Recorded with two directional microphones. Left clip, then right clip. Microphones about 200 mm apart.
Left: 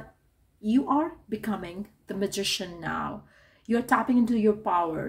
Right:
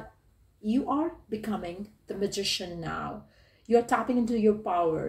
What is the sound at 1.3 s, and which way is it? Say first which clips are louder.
Speech: left 1 dB; 45° left (ahead or behind).